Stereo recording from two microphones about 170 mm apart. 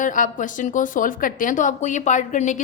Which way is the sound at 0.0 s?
50° left (ahead or behind).